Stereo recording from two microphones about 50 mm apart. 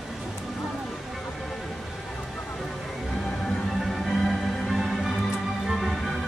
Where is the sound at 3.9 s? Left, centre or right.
Centre.